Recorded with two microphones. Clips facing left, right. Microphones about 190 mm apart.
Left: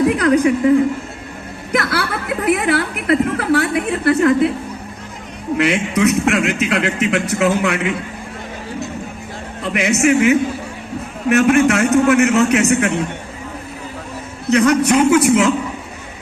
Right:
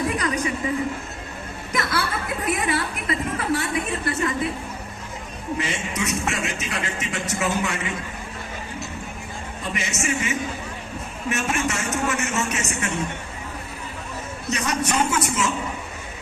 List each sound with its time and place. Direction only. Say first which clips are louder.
0.2 s a man's voice: left 12 dB; 65° left (ahead or behind)
1.7 s speech: left 6 dB; 65° left (ahead or behind)
5.5 s a man's voice: left 13 dB; 65° left (ahead or behind)
9.7 s a man's voice: left 14 dB; 65° left (ahead or behind)
14.5 s a man's voice: left 12 dB; 60° left (ahead or behind)